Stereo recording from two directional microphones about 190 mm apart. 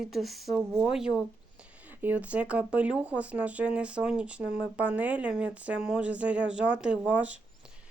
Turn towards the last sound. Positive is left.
turn(degrees=-5)  # may be behind; listen again after turning